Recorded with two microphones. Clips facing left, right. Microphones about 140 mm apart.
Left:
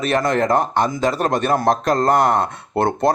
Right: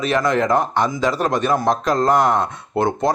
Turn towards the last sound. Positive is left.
turn(degrees=60)  # may be behind; listen again after turning